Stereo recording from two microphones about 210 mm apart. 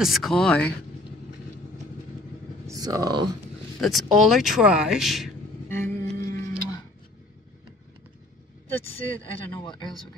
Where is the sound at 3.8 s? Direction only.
Centre (ahead or behind).